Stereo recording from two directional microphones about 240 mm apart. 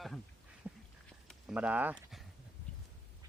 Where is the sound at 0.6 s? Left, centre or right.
Centre.